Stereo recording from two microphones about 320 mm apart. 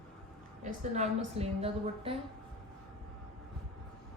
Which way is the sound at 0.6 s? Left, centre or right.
Right.